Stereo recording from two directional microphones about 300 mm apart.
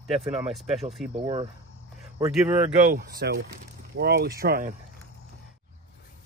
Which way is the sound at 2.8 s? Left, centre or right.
Right.